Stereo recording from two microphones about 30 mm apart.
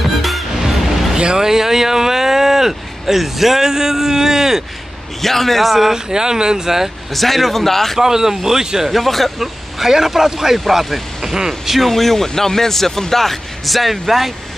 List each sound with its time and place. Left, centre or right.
0.0 s music: centre
1.1 s a sound: right
3.2 s speech: centre
3.6 s speech: centre
5.2 s speech: centre
5.7 s speech: centre
5.9 s speech: right
7.1 s speech: centre
8.0 s speech: centre
8.9 s speech: centre
9.8 s speech: centre
11.3 s speech: centre
11.9 s speech: centre